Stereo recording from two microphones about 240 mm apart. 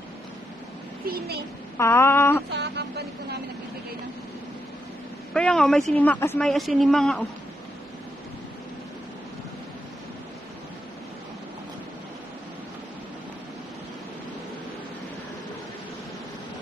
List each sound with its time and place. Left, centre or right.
1.0 s a woman's voice: right
1.8 s a sound: centre
2.5 s vehicle: right
5.3 s a woman's voice: centre